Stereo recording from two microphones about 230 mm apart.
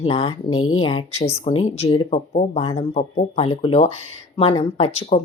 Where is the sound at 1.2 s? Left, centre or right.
Left.